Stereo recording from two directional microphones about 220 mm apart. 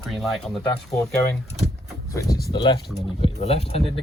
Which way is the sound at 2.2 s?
45° left (ahead or behind).